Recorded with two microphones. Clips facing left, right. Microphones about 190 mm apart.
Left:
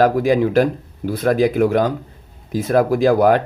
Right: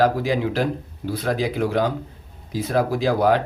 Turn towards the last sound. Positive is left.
turn(degrees=50)  # may be behind; listen again after turning